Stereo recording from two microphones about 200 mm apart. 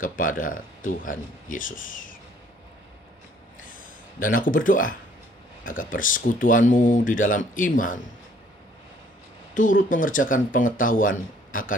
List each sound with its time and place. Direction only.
0.0 s speech: 45° left (ahead or behind)
3.6 s a sound: 45° left (ahead or behind)
5.6 s speech: 45° left (ahead or behind)
9.6 s speech: 40° left (ahead or behind)